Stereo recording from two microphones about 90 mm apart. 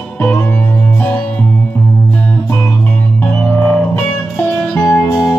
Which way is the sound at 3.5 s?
20° left (ahead or behind).